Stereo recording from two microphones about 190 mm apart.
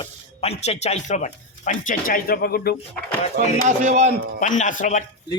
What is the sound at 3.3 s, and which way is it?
Speech, 40° right (ahead or behind).